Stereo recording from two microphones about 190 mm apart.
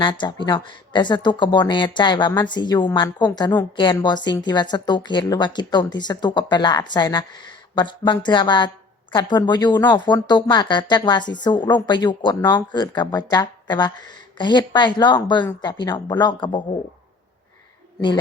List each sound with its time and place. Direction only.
0.0 s speech: 25° left (ahead or behind)